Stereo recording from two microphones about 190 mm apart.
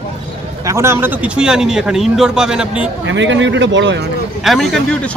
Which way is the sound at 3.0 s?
75° right (ahead or behind).